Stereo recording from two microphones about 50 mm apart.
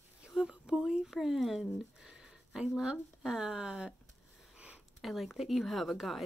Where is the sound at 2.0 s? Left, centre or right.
Centre.